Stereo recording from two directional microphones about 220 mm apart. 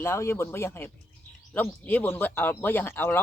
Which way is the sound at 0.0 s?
10° left (ahead or behind).